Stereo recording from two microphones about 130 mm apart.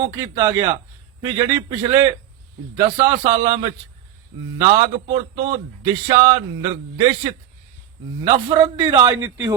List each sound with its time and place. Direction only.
0.1 s speech: 25° right (ahead or behind)
9.1 s speech: 25° right (ahead or behind)